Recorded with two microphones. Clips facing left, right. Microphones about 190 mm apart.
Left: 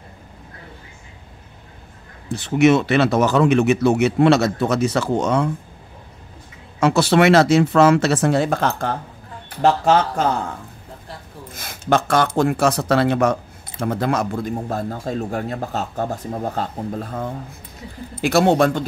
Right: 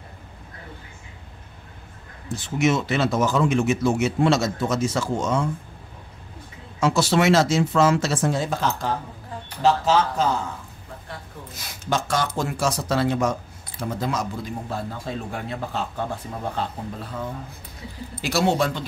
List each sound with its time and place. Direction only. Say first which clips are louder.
2.2 s speech: left 7 dB; 65° left (ahead or behind)
6.8 s speech: left 5 dB; 60° left (ahead or behind)
11.5 s a sound: left 4 dB; 50° left (ahead or behind)
11.9 s speech: left 7 dB; 60° left (ahead or behind)